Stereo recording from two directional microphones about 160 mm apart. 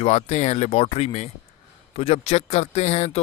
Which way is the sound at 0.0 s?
40° left (ahead or behind).